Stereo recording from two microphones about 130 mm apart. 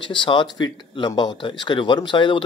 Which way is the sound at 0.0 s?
40° left (ahead or behind).